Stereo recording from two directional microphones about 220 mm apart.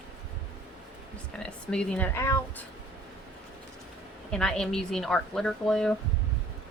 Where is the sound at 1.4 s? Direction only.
5° left (ahead or behind).